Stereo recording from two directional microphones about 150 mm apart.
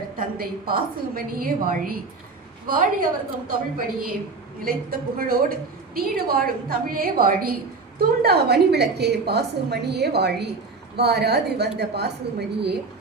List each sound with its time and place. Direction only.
0.7 s a woman's voice: 75° right (ahead or behind)
7.9 s a woman's voice: 90° right